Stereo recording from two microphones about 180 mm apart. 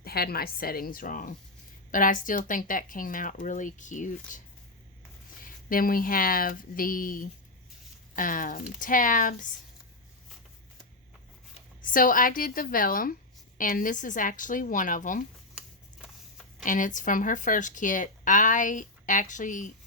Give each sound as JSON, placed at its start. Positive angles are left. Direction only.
{"t": 0.0, "sound": "a woman's voice", "side_deg": 60}
{"t": 5.6, "sound": "speech", "side_deg": 50}
{"t": 11.8, "sound": "speech", "side_deg": 50}
{"t": 16.6, "sound": "speech", "side_deg": 45}